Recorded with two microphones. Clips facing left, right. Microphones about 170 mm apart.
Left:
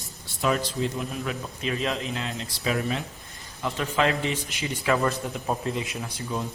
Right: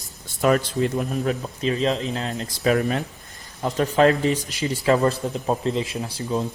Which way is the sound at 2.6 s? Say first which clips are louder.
Right 7 dB; 50° right (ahead or behind).